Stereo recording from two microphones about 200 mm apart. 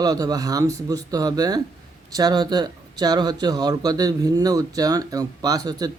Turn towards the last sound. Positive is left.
turn(degrees=-20)  # may be behind; listen again after turning